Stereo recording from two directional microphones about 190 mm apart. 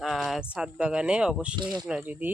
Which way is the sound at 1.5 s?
20° right (ahead or behind).